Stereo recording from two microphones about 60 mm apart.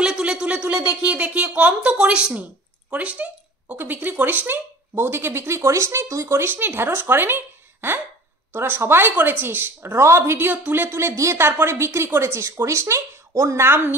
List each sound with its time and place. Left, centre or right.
0.0 s speech: centre
2.9 s a sound: right
3.7 s speech: right
9.9 s speech: right
11.4 s speech: right